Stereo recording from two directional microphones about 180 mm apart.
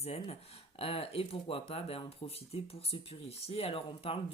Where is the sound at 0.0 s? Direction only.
35° left (ahead or behind).